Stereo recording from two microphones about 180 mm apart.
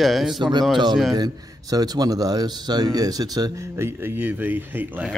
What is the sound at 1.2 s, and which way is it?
A man's voice, 20° right (ahead or behind).